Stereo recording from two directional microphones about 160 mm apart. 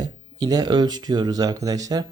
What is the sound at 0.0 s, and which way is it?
Speech, 25° right (ahead or behind).